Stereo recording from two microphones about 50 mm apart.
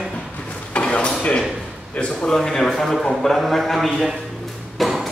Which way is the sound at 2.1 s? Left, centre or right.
Centre.